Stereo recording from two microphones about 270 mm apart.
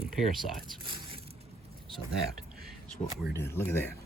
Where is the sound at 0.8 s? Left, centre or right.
Centre.